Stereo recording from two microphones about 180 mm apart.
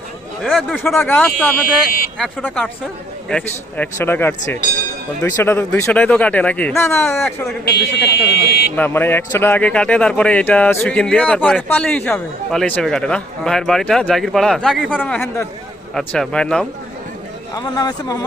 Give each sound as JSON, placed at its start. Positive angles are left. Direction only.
{"t": 0.4, "sound": "speech", "side_deg": 0}
{"t": 7.6, "sound": "speech", "side_deg": 65}
{"t": 8.7, "sound": "speech", "side_deg": 10}
{"t": 15.0, "sound": "speech", "side_deg": 10}
{"t": 17.5, "sound": "speech", "side_deg": 25}